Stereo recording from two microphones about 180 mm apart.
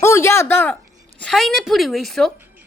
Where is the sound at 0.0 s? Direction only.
15° left (ahead or behind).